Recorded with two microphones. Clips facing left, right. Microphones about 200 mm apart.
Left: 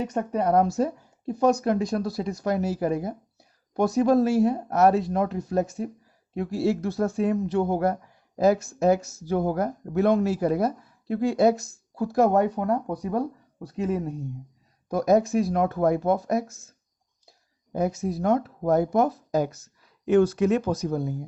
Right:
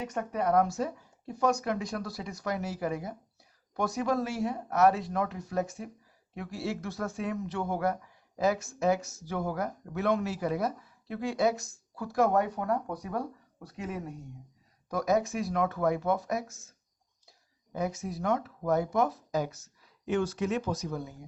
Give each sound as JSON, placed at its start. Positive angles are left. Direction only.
{"t": 0.0, "sound": "speech", "side_deg": 30}
{"t": 17.7, "sound": "speech", "side_deg": 40}